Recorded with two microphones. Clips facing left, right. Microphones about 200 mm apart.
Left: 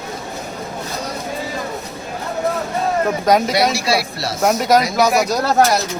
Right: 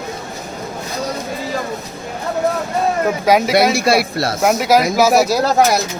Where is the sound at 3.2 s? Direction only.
5° right (ahead or behind).